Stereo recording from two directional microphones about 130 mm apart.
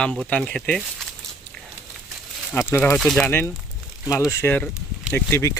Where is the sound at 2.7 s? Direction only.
15° left (ahead or behind).